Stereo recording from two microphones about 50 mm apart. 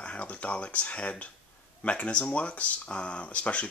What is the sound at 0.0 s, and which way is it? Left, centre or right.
Speech, left.